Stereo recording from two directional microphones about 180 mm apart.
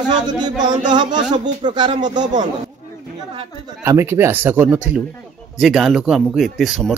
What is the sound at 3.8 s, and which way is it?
Speech, 15° right (ahead or behind).